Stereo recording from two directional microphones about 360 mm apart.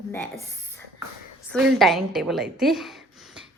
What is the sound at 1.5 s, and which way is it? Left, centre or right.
A woman's voice, centre.